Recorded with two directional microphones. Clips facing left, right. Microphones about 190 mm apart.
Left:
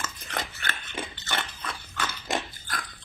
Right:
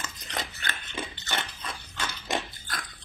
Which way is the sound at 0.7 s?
20° right (ahead or behind).